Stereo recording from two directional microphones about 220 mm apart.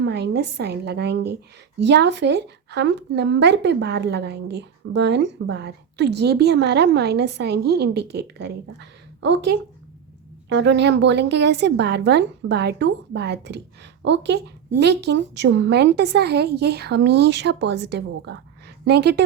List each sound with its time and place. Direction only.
0.0 s speech: 50° right (ahead or behind)